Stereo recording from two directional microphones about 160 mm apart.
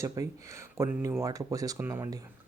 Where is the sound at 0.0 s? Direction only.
20° right (ahead or behind).